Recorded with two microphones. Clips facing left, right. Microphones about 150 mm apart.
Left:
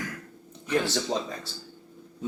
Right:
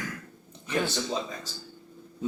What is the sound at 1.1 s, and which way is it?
Dishes, 75° left (ahead or behind).